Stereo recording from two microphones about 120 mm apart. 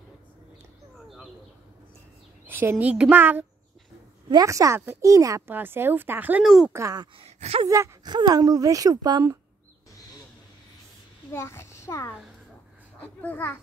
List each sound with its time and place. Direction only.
1.0 s a sound: centre (ahead or behind)
2.4 s a woman's voice: 15° right (ahead or behind)
4.3 s speech: 30° right (ahead or behind)
5.5 s a woman's voice: 15° right (ahead or behind)
6.4 s speech: centre (ahead or behind)
6.7 s speech: 25° right (ahead or behind)
7.2 s speech: 60° right (ahead or behind)
7.6 s speech: 25° right (ahead or behind)
11.3 s a child's voice: 20° left (ahead or behind)